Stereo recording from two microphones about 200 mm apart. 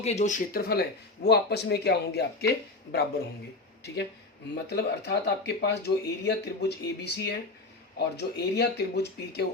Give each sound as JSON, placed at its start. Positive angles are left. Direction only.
{"t": 0.0, "sound": "speech", "side_deg": 35}
{"t": 4.6, "sound": "speech", "side_deg": 55}